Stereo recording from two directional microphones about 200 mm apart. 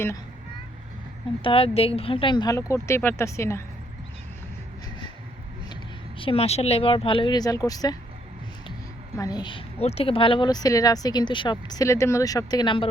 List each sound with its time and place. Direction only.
1.5 s speech: 30° left (ahead or behind)
6.1 s speech: 30° left (ahead or behind)
9.1 s speech: 20° left (ahead or behind)